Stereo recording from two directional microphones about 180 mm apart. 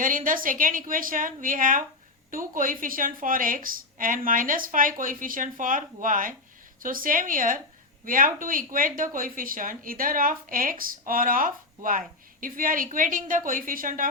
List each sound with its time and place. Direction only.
0.0 s a woman's voice: 50° right (ahead or behind)